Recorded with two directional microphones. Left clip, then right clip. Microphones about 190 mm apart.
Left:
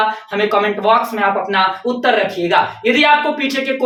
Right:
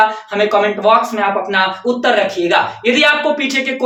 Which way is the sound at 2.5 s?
20° right (ahead or behind).